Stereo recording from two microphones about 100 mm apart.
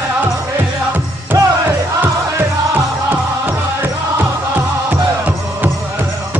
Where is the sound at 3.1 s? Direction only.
20° right (ahead or behind).